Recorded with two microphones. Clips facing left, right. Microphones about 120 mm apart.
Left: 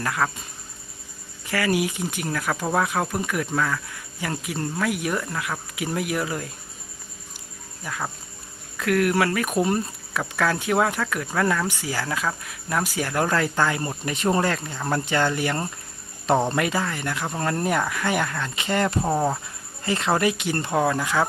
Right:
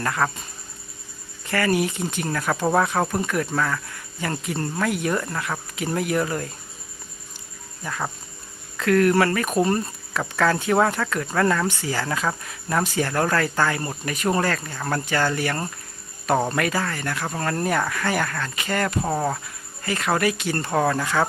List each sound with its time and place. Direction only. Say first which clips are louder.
0.0 s speech: right 1 dB; 5° left (ahead or behind)
1.5 s speech: right 1 dB; 10° left (ahead or behind)
7.9 s speech: right 2 dB; centre (ahead or behind)
18.5 s speech: left 2 dB; 25° left (ahead or behind)
19.0 s speech: left 1 dB; 10° left (ahead or behind)
19.8 s speech: left 1 dB; 25° left (ahead or behind)